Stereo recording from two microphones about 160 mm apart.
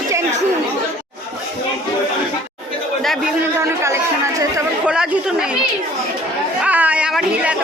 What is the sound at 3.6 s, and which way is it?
Speech, 15° right (ahead or behind).